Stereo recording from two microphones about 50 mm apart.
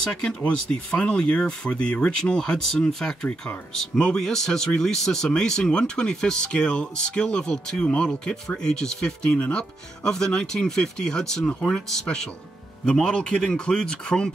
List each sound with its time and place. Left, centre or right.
0.0 s a man's voice: centre